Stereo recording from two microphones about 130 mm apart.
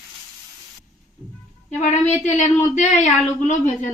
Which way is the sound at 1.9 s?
65° left (ahead or behind).